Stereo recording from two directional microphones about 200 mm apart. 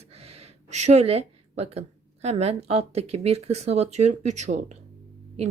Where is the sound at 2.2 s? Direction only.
30° right (ahead or behind).